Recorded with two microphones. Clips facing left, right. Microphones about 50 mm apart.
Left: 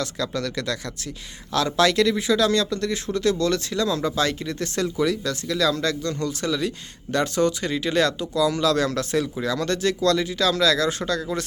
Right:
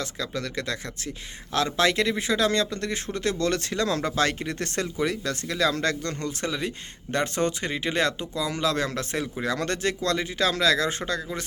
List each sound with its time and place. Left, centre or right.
0.0 s speech: centre
9.4 s speech: right